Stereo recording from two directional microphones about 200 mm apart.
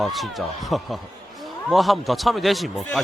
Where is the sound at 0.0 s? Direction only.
Centre (ahead or behind).